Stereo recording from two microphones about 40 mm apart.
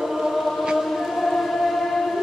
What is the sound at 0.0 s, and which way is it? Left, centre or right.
Chant, centre.